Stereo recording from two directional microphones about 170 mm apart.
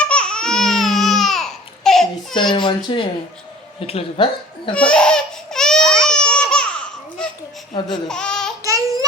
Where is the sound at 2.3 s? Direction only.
25° left (ahead or behind).